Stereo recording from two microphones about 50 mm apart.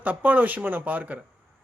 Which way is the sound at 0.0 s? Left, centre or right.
Right.